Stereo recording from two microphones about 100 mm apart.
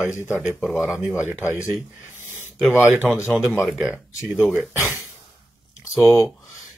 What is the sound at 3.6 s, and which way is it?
Speech, 10° right (ahead or behind).